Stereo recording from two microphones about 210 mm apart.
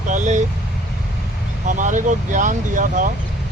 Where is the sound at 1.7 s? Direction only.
35° right (ahead or behind).